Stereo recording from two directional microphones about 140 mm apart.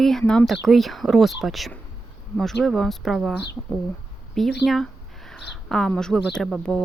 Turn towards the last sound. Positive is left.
turn(degrees=5)  # may be behind; listen again after turning